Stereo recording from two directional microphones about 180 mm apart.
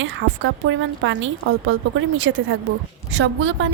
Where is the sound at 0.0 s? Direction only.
90° right.